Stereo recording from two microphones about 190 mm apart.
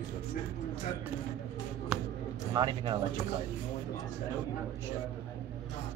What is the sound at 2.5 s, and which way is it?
Speech, 25° right (ahead or behind).